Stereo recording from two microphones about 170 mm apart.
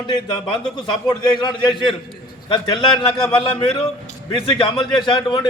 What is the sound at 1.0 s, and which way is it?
A man's voice, 25° left (ahead or behind).